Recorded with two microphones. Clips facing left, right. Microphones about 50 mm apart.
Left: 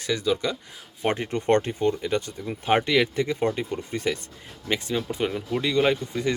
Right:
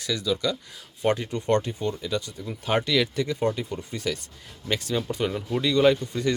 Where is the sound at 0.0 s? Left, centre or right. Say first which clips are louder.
Left 1 dB; left.